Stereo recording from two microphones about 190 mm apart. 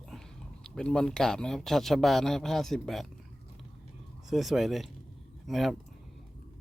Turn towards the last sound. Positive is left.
turn(degrees=0)  # may be behind; listen again after turning